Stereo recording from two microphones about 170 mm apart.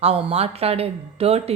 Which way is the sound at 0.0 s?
35° right (ahead or behind).